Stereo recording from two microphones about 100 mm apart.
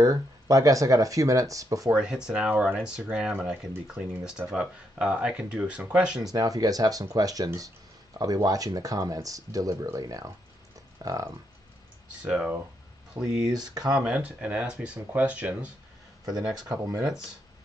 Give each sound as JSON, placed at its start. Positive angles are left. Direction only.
{"t": 0.0, "sound": "speech", "side_deg": -35}
{"t": 2.0, "sound": "speech", "side_deg": -10}
{"t": 6.2, "sound": "speech", "side_deg": -35}
{"t": 12.3, "sound": "speech", "side_deg": -10}
{"t": 13.2, "sound": "speech", "side_deg": -30}
{"t": 13.8, "sound": "speech", "side_deg": -10}
{"t": 16.7, "sound": "speech", "side_deg": -30}